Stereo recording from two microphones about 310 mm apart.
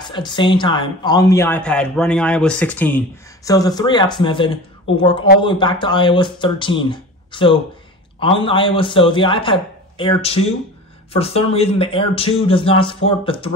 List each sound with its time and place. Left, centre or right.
0.0 s speech: centre